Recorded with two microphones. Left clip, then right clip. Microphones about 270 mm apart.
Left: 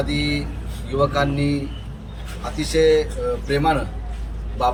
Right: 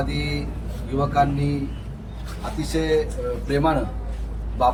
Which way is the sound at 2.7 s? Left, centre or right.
Centre.